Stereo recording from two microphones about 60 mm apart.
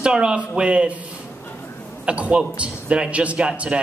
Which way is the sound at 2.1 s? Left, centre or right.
Centre.